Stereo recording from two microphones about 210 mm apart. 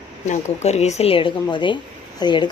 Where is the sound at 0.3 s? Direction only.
30° left (ahead or behind).